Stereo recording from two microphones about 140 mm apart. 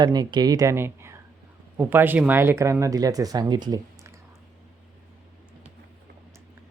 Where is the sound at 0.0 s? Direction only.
30° right (ahead or behind).